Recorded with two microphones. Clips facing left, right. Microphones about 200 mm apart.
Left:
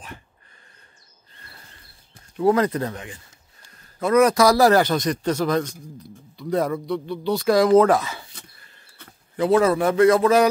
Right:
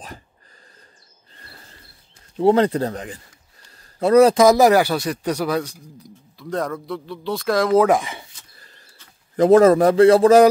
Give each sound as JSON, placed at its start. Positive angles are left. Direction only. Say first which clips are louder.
{"t": 1.3, "sound": "insect", "louder": "right 3 dB", "side_deg": -30}
{"t": 2.3, "sound": "a man's voice", "louder": "right 3 dB", "side_deg": -30}
{"t": 6.4, "sound": "speech", "louder": "left 3 dB", "side_deg": 5}
{"t": 7.9, "sound": "speech", "louder": "right 2 dB", "side_deg": -15}
{"t": 9.4, "sound": "a man's voice", "louder": "right 6 dB", "side_deg": -45}